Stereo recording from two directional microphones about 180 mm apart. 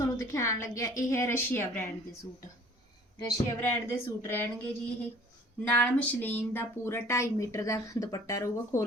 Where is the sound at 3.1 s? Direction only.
15° left (ahead or behind).